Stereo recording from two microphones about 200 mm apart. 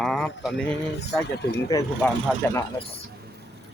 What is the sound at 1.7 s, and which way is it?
Speech, 20° left (ahead or behind).